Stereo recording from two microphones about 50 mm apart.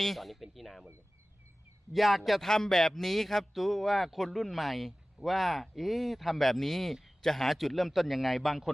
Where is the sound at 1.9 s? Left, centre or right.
Centre.